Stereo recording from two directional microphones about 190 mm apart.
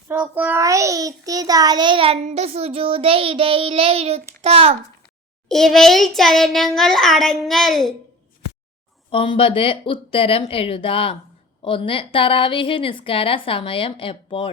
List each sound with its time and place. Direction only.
0.1 s a child's voice: 10° right (ahead or behind); by 4.8 s 35° right (ahead or behind)
5.5 s child singing: centre (ahead or behind)
9.0 s a woman's voice: 25° left (ahead or behind)